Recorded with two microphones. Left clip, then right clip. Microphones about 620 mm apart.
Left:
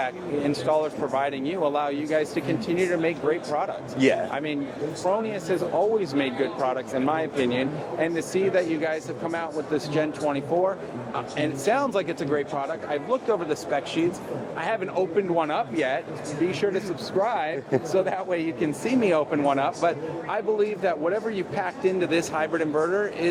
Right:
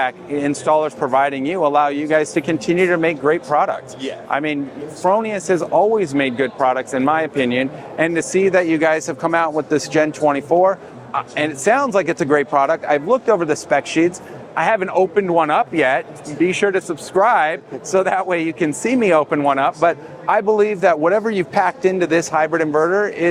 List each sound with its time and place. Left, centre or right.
0.0 s speech: right